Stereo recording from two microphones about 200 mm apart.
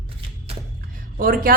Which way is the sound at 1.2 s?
45° right (ahead or behind).